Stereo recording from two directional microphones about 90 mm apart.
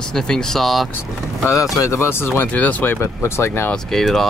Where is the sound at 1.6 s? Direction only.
35° left (ahead or behind).